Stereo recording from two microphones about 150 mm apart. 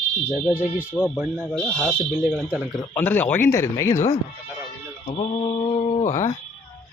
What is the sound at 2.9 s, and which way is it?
Speech, 10° left (ahead or behind).